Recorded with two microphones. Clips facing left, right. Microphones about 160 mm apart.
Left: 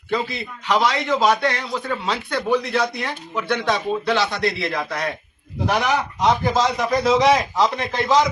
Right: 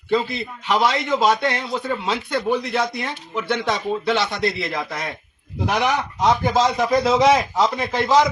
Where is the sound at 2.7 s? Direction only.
Centre (ahead or behind).